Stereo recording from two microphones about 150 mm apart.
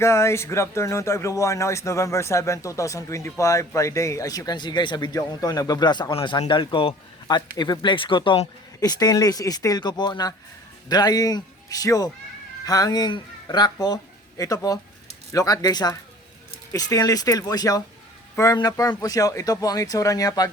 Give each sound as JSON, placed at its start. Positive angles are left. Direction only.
{"t": 0.0, "sound": "a man's voice", "side_deg": 20}